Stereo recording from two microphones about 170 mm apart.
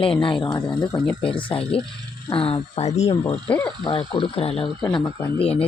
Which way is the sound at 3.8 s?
30° left (ahead or behind).